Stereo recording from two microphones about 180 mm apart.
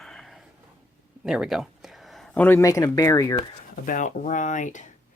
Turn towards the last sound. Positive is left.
turn(degrees=45)  # may be behind; listen again after turning